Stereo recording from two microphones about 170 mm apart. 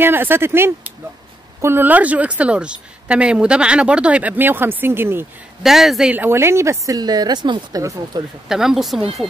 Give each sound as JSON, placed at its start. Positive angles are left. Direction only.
{"t": 0.0, "sound": "a woman's voice", "side_deg": -10}
{"t": 5.6, "sound": "a woman's voice", "side_deg": 0}
{"t": 8.5, "sound": "speech", "side_deg": 0}